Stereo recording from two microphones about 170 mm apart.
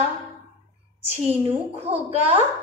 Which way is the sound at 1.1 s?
40° right (ahead or behind).